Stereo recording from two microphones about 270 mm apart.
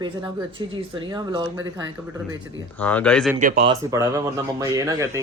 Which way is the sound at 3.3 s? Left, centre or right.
Right.